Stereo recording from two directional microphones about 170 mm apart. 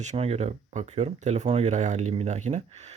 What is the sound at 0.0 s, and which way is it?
Speech, 40° right (ahead or behind).